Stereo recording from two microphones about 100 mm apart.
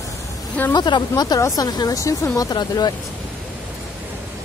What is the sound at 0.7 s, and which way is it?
Speech, 50° left (ahead or behind).